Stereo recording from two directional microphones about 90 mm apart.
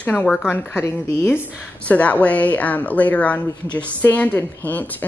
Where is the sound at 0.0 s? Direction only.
15° left (ahead or behind).